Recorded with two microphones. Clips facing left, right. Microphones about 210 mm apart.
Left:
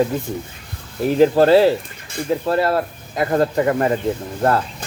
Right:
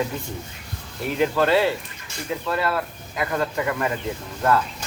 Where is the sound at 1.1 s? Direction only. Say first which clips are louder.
Left 8 dB; 35° left (ahead or behind).